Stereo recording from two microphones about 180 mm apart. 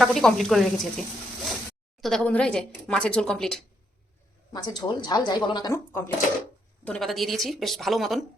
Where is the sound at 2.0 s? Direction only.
5° left (ahead or behind).